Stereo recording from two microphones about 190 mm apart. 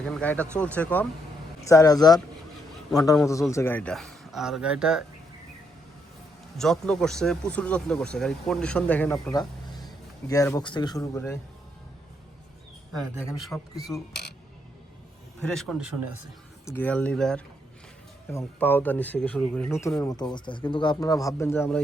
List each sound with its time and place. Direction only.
0.0 s speech: 5° left (ahead or behind); by 2.2 s 20° left (ahead or behind)
3.5 s speech: 10° left (ahead or behind); by 5.0 s 5° right (ahead or behind)
6.6 s speech: 5° left (ahead or behind)
13.4 s speech: centre (ahead or behind)
15.4 s speech: 5° left (ahead or behind)
16.6 s speech: 10° left (ahead or behind)